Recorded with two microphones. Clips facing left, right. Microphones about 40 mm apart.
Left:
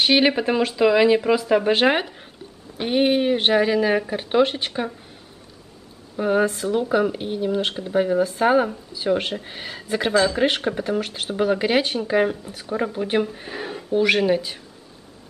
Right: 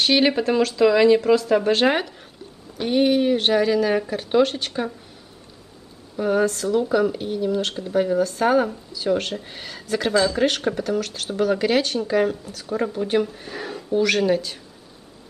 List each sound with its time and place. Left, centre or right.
0.0 s speech: centre
6.1 s speech: centre
12.7 s speech: centre